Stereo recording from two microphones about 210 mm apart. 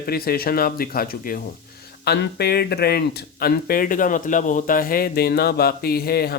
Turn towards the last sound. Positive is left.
turn(degrees=45)  # may be behind; listen again after turning